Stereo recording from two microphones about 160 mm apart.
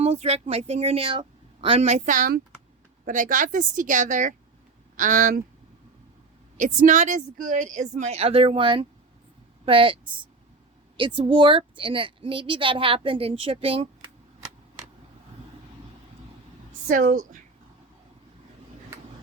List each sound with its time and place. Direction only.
0.0 s a woman's voice: 40° right (ahead or behind)
6.6 s a woman's voice: 55° right (ahead or behind); by 14.1 s 35° right (ahead or behind)
16.9 s a woman's voice: 60° right (ahead or behind)